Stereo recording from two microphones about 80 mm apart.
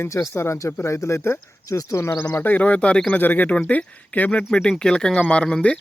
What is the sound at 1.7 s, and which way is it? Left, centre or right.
Speech, left.